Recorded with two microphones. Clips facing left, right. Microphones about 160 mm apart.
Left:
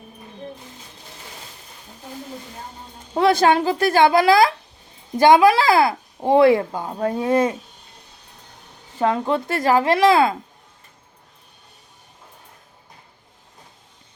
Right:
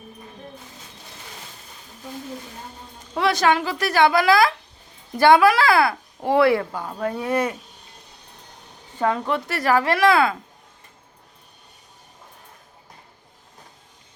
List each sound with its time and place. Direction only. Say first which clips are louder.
3.2 s a child's voice: left 4 dB; 30° left (ahead or behind)
9.0 s a child's voice: left 2 dB; 25° left (ahead or behind)